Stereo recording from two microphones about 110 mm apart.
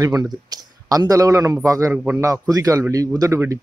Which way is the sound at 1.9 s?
10° right (ahead or behind).